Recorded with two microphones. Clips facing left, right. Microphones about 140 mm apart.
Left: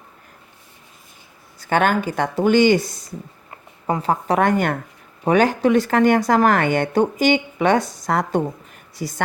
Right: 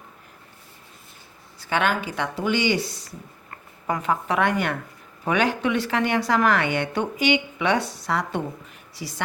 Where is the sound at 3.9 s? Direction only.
35° left (ahead or behind).